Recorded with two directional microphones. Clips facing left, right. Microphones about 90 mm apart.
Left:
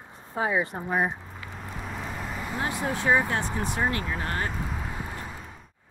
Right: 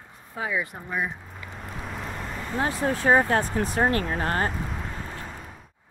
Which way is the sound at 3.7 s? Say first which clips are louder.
Right 6 dB; 45° right (ahead or behind).